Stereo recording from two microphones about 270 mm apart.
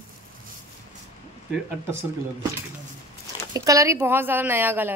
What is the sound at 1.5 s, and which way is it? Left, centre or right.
Speech, centre.